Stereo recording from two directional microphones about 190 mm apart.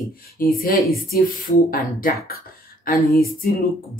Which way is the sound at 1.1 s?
50° left (ahead or behind).